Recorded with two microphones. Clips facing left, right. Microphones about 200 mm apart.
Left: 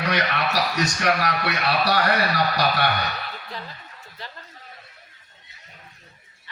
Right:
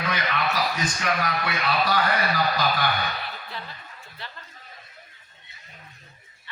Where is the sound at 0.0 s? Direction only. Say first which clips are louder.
Left 3 dB; 70° left (ahead or behind).